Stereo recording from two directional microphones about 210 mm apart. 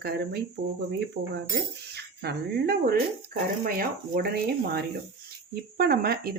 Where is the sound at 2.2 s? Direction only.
50° right (ahead or behind).